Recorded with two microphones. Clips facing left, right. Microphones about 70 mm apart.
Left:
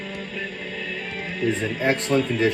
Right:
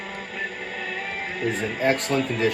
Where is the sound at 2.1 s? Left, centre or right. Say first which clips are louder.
Left 3 dB; right.